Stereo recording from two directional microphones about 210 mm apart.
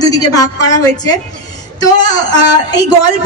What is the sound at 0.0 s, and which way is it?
A woman's voice, 20° left (ahead or behind).